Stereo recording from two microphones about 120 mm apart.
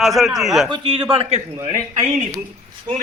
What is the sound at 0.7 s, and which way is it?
Speech, 40° right (ahead or behind).